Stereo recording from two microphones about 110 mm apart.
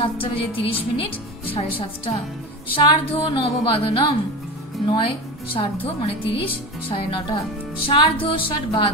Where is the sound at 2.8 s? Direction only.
45° left (ahead or behind).